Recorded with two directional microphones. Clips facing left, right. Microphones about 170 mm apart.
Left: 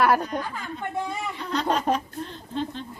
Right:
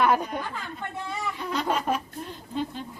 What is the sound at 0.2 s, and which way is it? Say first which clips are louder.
Speech: left 2 dB; 5° right (ahead or behind).